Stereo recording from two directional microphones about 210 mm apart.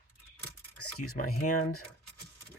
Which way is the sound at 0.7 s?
90° left.